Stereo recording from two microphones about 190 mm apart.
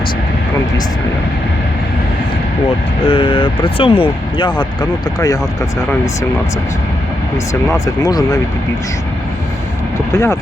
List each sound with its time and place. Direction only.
3.0 s speech: 30° left (ahead or behind)
8.0 s speech: 20° left (ahead or behind)
10.1 s speech: 15° left (ahead or behind)